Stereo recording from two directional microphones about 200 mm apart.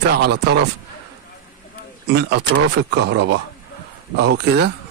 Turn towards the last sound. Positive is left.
turn(degrees=-55)  # may be behind; listen again after turning